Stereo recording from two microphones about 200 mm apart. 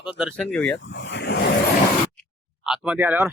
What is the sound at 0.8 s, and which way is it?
Speech, 65° left (ahead or behind).